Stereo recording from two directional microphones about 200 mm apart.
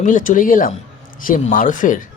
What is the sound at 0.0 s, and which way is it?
Speech, 40° left (ahead or behind).